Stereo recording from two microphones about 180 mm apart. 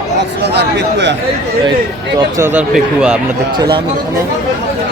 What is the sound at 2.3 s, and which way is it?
Speech, 15° right (ahead or behind).